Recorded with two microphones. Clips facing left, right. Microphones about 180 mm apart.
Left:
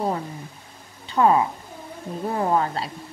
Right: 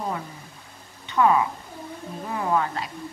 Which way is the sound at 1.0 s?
35° left (ahead or behind).